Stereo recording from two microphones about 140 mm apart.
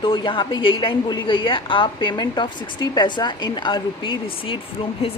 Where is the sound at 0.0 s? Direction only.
35° left (ahead or behind).